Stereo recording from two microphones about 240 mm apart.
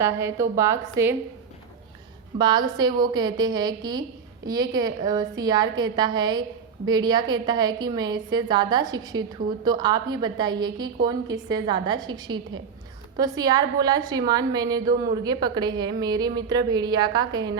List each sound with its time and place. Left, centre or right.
0.0 s a woman's voice: centre
2.4 s a woman's voice: centre